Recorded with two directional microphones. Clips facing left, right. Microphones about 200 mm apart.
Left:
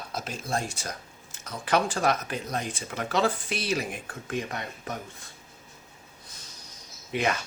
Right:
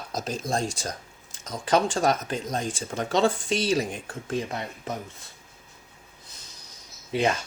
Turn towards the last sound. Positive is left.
turn(degrees=-30)  # may be behind; listen again after turning